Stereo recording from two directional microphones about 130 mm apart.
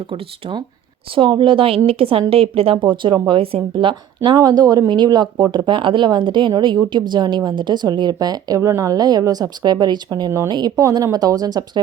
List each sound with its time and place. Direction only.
0.1 s speech: 45° right (ahead or behind)